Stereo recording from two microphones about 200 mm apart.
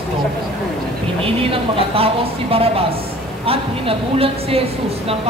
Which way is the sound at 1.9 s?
30° right (ahead or behind).